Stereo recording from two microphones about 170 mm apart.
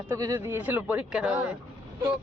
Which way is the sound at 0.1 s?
20° right (ahead or behind).